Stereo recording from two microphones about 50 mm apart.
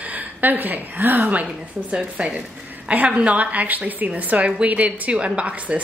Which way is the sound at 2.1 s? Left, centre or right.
Right.